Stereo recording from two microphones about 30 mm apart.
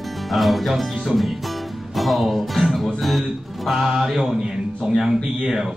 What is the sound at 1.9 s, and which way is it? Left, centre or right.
Music, centre.